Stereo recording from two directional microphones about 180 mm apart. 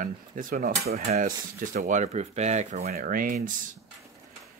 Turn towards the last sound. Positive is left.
turn(degrees=-50)  # may be behind; listen again after turning